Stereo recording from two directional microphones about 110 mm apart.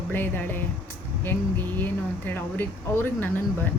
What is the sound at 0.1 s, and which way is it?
Speech, 20° left (ahead or behind).